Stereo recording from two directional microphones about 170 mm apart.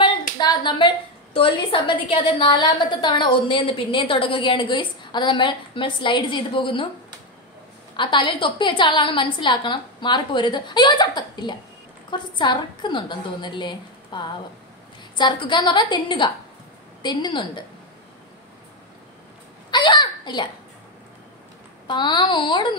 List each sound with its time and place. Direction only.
0.4 s a woman's voice: 25° left (ahead or behind)
7.9 s a woman's voice: 30° left (ahead or behind)
19.7 s a child's voice: 25° left (ahead or behind)
21.8 s a woman's voice: 25° left (ahead or behind)